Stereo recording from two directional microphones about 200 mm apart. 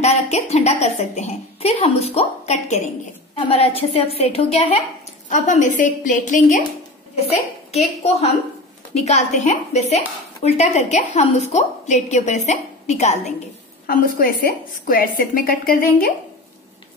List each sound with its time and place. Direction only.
0.0 s a woman's voice: 35° left (ahead or behind)
7.7 s a woman's voice: 30° left (ahead or behind)
13.8 s a woman's voice: 45° left (ahead or behind)